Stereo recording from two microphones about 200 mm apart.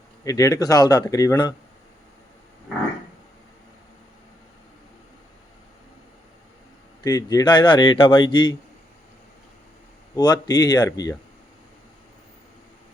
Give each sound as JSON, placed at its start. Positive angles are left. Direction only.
{"t": 0.3, "sound": "speech", "side_deg": 15}
{"t": 7.0, "sound": "speech", "side_deg": 20}
{"t": 10.2, "sound": "speech", "side_deg": 20}